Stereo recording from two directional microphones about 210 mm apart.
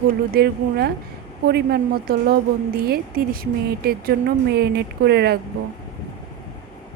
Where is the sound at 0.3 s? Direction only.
50° right (ahead or behind).